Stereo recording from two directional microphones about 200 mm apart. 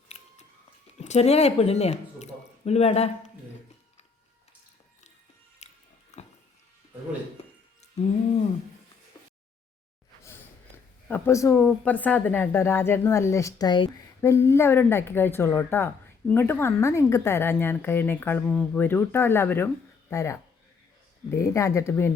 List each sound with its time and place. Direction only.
0.9 s speech: 35° left (ahead or behind)
5.6 s music: 35° left (ahead or behind)
11.1 s speech: 15° left (ahead or behind)